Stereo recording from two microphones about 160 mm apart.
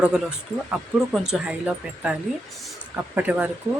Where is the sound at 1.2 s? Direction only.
5° right (ahead or behind).